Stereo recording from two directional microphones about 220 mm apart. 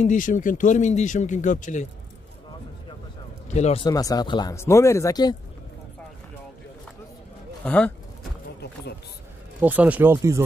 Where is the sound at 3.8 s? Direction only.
15° left (ahead or behind).